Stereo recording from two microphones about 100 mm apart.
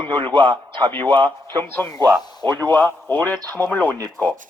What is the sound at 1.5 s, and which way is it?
A man's voice, 20° left (ahead or behind).